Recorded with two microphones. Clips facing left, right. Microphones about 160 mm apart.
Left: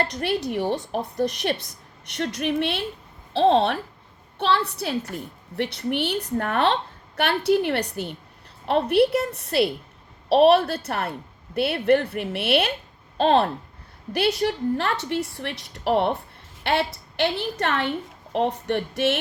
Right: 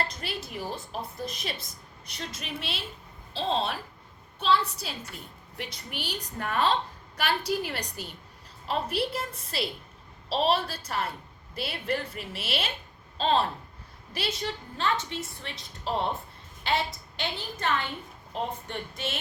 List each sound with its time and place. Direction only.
0.0 s a woman's voice: 65° left (ahead or behind)